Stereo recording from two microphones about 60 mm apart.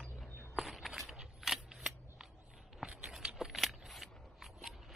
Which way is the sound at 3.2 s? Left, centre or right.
Centre.